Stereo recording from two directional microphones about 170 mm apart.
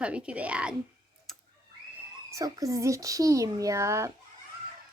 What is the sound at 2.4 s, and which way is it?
Speech, 20° right (ahead or behind).